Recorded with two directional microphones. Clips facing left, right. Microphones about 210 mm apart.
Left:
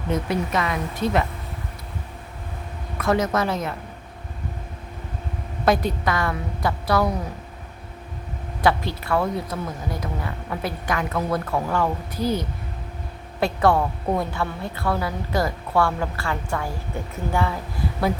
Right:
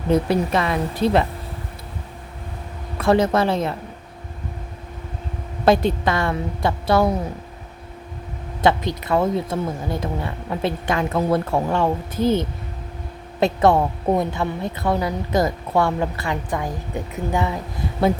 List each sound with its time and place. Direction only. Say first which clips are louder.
0.1 s a woman's voice: right 5 dB; 30° right (ahead or behind)
3.0 s a woman's voice: right 4 dB; 30° right (ahead or behind)
5.6 s a woman's voice: right 4 dB; 25° right (ahead or behind)
8.6 s a woman's voice: right 3 dB; 20° right (ahead or behind)